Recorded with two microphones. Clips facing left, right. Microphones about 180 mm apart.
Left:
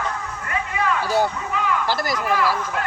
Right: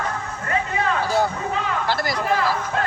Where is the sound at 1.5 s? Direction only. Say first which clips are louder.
Left 1 dB; 35° right (ahead or behind).